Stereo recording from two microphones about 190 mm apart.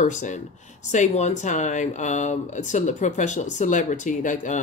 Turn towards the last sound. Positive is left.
turn(degrees=40)  # may be behind; listen again after turning